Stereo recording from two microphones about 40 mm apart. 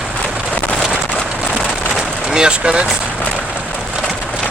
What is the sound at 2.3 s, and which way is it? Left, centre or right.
Speech, right.